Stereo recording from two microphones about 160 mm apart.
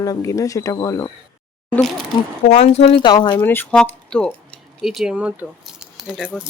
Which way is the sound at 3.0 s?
30° left (ahead or behind).